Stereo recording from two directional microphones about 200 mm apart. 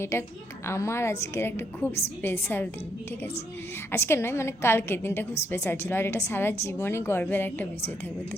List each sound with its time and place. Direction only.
0.0 s a woman's voice: 10° left (ahead or behind)
3.9 s a woman's voice: 10° left (ahead or behind)